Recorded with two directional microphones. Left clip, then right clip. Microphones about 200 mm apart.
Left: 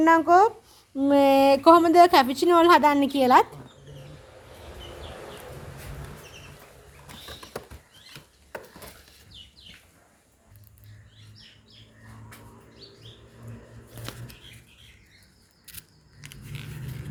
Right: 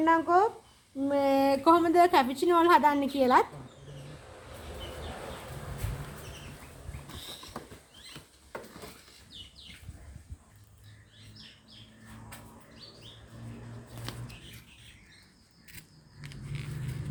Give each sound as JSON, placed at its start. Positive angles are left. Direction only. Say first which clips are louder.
{"t": 0.0, "sound": "speech", "louder": "left 7 dB", "side_deg": 55}
{"t": 16.2, "sound": "vehicle", "louder": "left 2 dB", "side_deg": 20}